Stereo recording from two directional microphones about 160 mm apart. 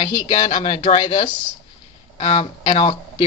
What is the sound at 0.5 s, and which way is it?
Speech, 45° left (ahead or behind).